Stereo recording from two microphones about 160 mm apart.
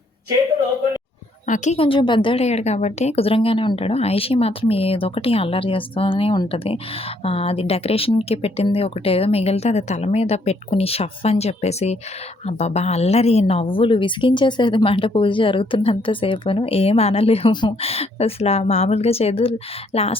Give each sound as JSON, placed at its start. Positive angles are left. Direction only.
{"t": 1.5, "sound": "a woman's voice", "side_deg": 50}
{"t": 1.8, "sound": "a woman's voice", "side_deg": 30}